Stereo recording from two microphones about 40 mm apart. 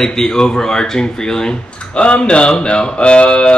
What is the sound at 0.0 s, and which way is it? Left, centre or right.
Speech, centre.